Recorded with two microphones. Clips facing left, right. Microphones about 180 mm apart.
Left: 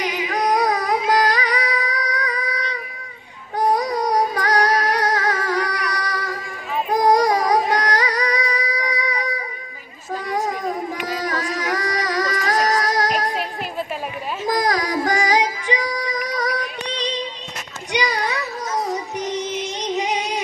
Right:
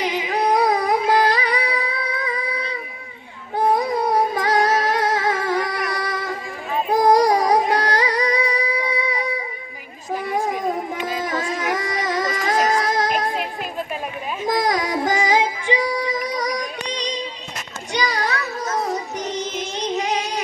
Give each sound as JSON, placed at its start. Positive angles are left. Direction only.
{"t": 0.0, "sound": "music", "side_deg": -30}
{"t": 14.5, "sound": "music", "side_deg": -25}